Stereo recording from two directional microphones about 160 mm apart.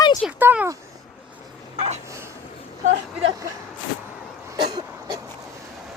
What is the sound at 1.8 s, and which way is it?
Speech, 45° right (ahead or behind).